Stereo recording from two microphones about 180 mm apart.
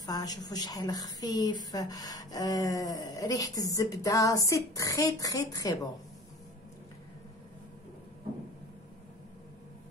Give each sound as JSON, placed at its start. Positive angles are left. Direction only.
{"t": 0.0, "sound": "a woman's voice", "side_deg": 20}